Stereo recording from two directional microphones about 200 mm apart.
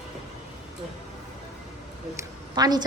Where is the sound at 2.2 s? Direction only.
20° right (ahead or behind).